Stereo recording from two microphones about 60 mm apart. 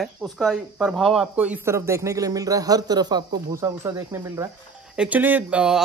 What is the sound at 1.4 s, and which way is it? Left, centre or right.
Speech, right.